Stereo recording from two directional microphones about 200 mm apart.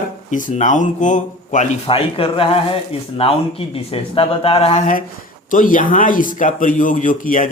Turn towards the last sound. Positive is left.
turn(degrees=40)  # may be behind; listen again after turning